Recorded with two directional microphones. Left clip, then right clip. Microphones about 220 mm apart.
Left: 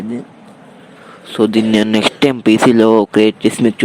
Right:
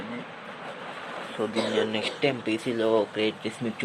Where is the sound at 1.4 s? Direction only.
50° left (ahead or behind).